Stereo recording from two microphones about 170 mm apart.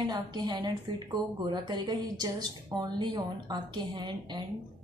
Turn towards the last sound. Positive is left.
turn(degrees=-25)  # may be behind; listen again after turning